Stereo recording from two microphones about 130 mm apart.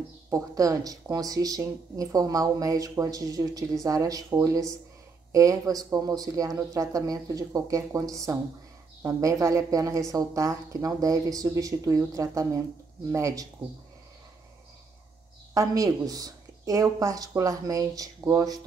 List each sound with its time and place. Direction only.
0.3 s speech: 25° right (ahead or behind)
15.5 s speech: 25° right (ahead or behind)